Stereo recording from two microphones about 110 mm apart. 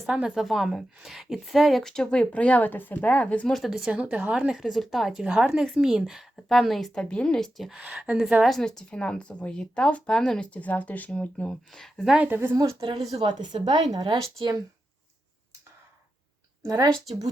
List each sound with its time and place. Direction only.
0.0 s a woman's voice: 5° right (ahead or behind); by 3.5 s 10° left (ahead or behind)
3.5 s a woman's voice: centre (ahead or behind)
8.4 s speech: 5° left (ahead or behind)
12.2 s a woman's voice: 20° right (ahead or behind)
13.1 s a woman's voice: 45° right (ahead or behind)
16.6 s a woman's voice: 35° right (ahead or behind)